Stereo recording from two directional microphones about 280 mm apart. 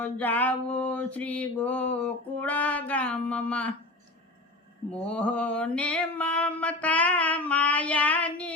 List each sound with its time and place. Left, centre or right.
0.0 s mantra: centre
4.9 s mantra: centre